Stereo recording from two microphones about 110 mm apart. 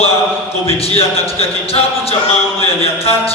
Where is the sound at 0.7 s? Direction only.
60° left (ahead or behind).